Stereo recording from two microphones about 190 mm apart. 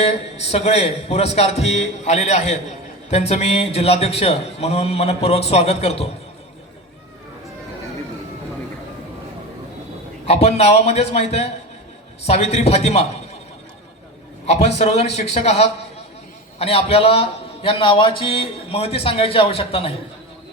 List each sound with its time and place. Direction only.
0.0 s a man's voice: 35° left (ahead or behind)
10.2 s a man's voice: 35° left (ahead or behind)
14.4 s a man's voice: 35° left (ahead or behind)